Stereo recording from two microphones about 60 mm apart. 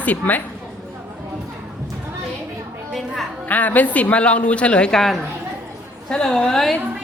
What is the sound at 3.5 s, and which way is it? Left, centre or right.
A woman's voice, left.